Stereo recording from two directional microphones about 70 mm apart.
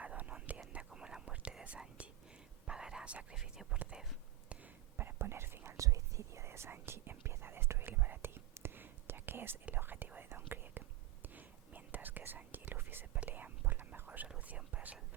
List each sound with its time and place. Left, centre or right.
0.0 s whispering: right
4.9 s whispering: right
5.7 s whispering: right
14.3 s speech: centre